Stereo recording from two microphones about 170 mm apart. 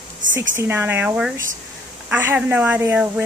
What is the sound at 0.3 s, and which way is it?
Speech, 15° right (ahead or behind).